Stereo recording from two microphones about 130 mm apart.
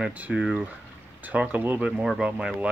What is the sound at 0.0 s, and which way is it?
Speech, 10° right (ahead or behind).